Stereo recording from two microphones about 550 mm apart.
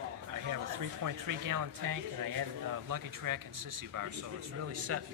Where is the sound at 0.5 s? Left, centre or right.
Right.